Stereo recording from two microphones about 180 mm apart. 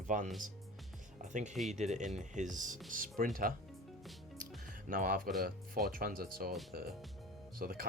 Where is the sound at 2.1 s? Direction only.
40° right (ahead or behind).